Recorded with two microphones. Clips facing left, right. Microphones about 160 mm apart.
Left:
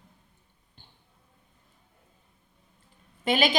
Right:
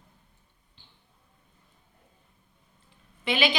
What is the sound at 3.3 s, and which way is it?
Speech, 45° left (ahead or behind).